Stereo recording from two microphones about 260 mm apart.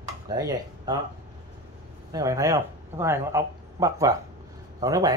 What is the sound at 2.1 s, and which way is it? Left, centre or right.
Speech, centre.